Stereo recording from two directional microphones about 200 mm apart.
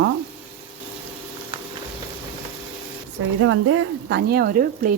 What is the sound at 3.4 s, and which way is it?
Speech, 90° right.